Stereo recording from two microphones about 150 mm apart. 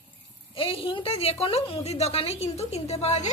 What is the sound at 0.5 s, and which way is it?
A woman's voice, 35° left (ahead or behind).